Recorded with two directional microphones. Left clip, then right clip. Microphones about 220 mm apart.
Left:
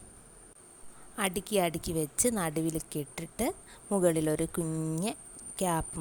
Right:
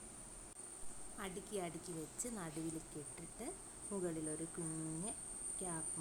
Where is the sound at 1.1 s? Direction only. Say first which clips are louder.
Left 16 dB; 40° left (ahead or behind).